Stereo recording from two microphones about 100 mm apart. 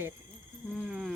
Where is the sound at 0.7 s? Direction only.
Centre (ahead or behind).